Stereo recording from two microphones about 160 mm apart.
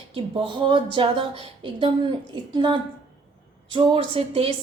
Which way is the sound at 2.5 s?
30° right (ahead or behind).